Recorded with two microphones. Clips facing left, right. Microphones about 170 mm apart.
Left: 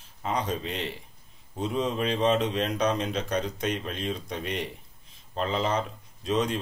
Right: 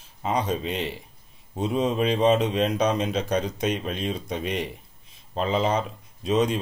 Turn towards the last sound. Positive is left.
turn(degrees=-20)  # may be behind; listen again after turning